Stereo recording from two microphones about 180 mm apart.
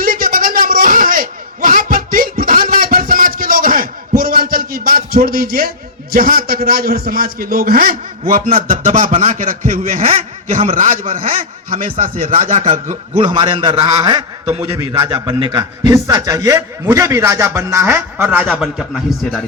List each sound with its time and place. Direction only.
0.0 s a sound: 50° right (ahead or behind)
8.3 s a man's voice: 50° right (ahead or behind)
13.2 s a man's voice: 25° right (ahead or behind)
14.6 s a man's voice: 15° right (ahead or behind)
15.0 s a man's voice: 25° right (ahead or behind); by 19.4 s centre (ahead or behind)